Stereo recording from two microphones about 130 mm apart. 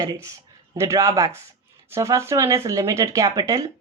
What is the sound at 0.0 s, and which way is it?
A woman's voice, 25° right (ahead or behind).